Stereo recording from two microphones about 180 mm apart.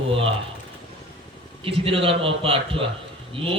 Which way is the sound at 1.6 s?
30° right (ahead or behind).